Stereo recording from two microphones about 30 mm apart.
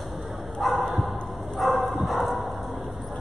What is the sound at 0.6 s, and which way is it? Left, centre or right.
Bow-wow, centre.